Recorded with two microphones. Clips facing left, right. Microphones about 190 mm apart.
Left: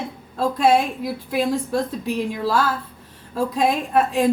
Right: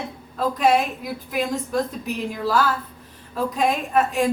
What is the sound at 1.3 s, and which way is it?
A woman's voice, 30° left (ahead or behind).